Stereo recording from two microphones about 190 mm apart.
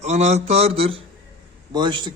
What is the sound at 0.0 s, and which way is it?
Speech, 35° right (ahead or behind).